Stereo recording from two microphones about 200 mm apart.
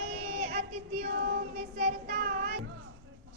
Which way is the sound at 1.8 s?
45° right (ahead or behind).